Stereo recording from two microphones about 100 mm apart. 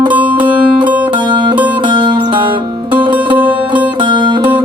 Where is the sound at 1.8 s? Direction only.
50° right (ahead or behind).